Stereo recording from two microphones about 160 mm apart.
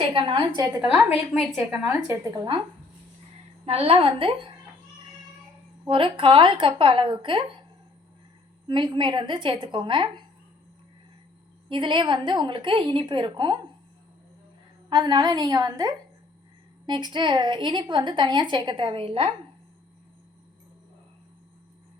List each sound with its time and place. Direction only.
0.1 s a woman's voice: 30° right (ahead or behind)
1.1 s a woman's voice: centre (ahead or behind)
2.0 s a woman's voice: 25° right (ahead or behind)
3.7 s a woman's voice: 35° right (ahead or behind)
5.9 s a woman's voice: 35° right (ahead or behind)
8.6 s a woman's voice: 30° right (ahead or behind)
11.7 s a woman's voice: 30° right (ahead or behind)
14.8 s a woman's voice: 25° right (ahead or behind)